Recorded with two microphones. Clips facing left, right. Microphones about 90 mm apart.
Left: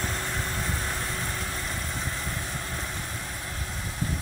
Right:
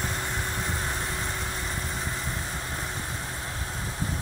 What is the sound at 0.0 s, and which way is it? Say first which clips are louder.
Vehicle: even; 15° right (ahead or behind).